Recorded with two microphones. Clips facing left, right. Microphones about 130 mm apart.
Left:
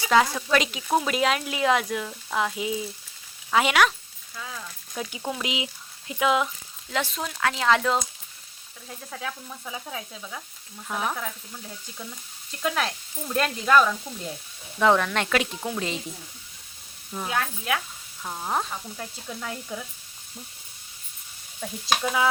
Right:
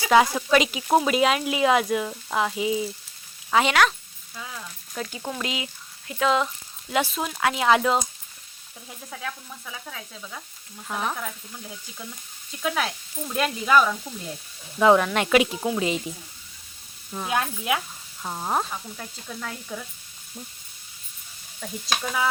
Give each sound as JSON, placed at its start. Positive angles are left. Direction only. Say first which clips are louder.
{"t": 0.1, "sound": "speech", "louder": "right 3 dB", "side_deg": -10}
{"t": 4.9, "sound": "speech", "louder": "even", "side_deg": 10}
{"t": 6.2, "sound": "speech", "louder": "right 1 dB", "side_deg": 5}
{"t": 6.9, "sound": "speech", "louder": "right 4 dB", "side_deg": -10}
{"t": 9.0, "sound": "speech", "louder": "even", "side_deg": 0}
{"t": 9.6, "sound": "sizzle", "louder": "left 4 dB", "side_deg": 20}
{"t": 10.8, "sound": "speech", "louder": "even", "side_deg": 0}
{"t": 12.6, "sound": "speech", "louder": "even", "side_deg": 0}
{"t": 17.2, "sound": "speech", "louder": "right 2 dB", "side_deg": -15}
{"t": 18.7, "sound": "speech", "louder": "even", "side_deg": 5}
{"t": 21.6, "sound": "speech", "louder": "left 3 dB", "side_deg": 5}